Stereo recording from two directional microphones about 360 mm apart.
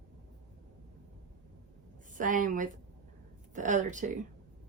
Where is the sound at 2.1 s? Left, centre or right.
Right.